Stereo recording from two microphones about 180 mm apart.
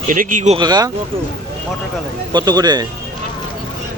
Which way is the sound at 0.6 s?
25° right (ahead or behind).